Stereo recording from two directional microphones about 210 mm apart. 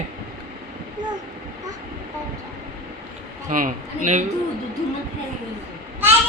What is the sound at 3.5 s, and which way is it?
Speech, 40° right (ahead or behind).